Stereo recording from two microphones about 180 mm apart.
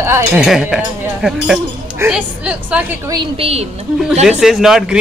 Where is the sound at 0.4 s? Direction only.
5° right (ahead or behind).